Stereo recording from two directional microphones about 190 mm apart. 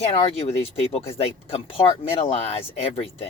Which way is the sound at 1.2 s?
30° left (ahead or behind).